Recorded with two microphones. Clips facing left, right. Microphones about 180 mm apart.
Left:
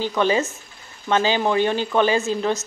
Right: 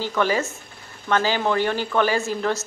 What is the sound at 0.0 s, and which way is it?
A woman's voice, 20° left (ahead or behind).